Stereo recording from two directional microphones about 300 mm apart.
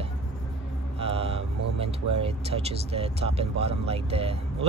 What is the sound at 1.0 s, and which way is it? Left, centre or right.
Speech, centre.